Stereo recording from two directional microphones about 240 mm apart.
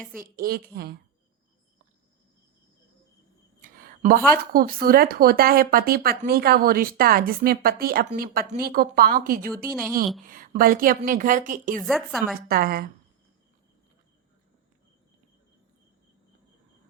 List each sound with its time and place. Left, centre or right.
0.3 s speech: right
3.6 s a sound: right
4.5 s speech: right
11.9 s a woman's voice: centre
12.5 s speech: right